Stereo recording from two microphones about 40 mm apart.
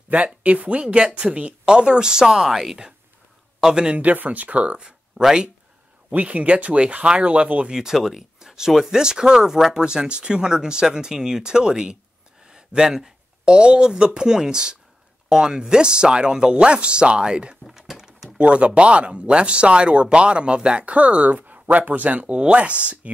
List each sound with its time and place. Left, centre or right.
0.1 s speech: right; by 2.9 s centre
3.6 s speech: centre
4.0 s speech: right
5.2 s speech: left
6.2 s speech: right
7.7 s speech: centre
12.4 s a sound: centre
13.6 s speech: right
17.6 s a sound: centre
18.4 s speech: right
21.3 s speech: right